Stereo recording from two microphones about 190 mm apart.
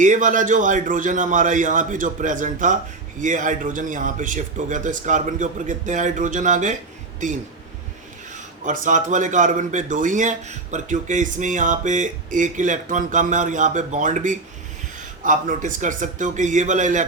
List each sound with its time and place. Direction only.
0.0 s a man's voice: 40° right (ahead or behind)
8.6 s speech: 45° right (ahead or behind)